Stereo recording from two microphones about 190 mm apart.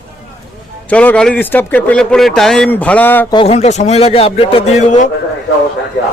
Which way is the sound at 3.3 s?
35° left (ahead or behind).